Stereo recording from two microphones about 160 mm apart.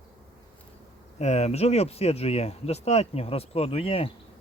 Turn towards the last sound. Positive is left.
turn(degrees=35)  # may be behind; listen again after turning